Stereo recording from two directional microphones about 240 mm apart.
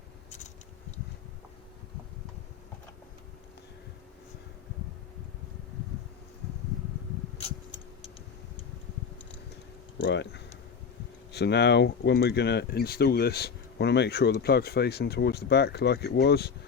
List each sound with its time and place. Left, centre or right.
10.0 s speech: left